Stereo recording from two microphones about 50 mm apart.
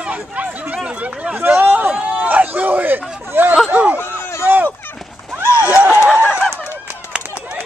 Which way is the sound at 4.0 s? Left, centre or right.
Left.